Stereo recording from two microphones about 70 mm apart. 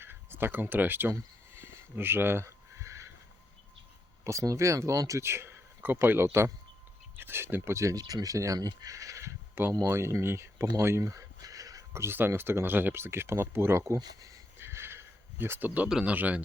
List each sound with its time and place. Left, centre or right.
0.0 s speech: right
1.1 s a sound: right
4.2 s speech: right
5.2 s speech: right
7.9 s speech: right
11.9 s speech: right
13.9 s speech: right
14.6 s a sound: right
15.9 s speech: centre
16.1 s speech: right